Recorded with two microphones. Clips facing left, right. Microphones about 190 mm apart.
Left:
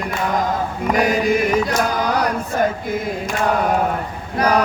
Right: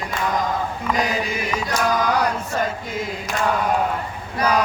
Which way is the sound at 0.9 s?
55° left (ahead or behind).